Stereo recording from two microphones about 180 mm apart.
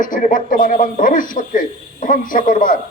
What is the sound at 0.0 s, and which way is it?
Speech, 50° left (ahead or behind).